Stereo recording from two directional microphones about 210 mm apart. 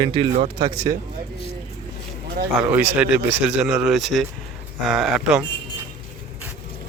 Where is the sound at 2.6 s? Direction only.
10° right (ahead or behind).